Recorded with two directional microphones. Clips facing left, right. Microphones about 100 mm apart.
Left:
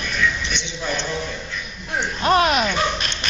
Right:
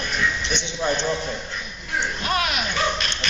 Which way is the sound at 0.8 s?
35° right (ahead or behind).